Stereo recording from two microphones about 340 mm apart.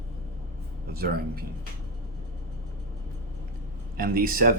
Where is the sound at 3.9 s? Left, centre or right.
Right.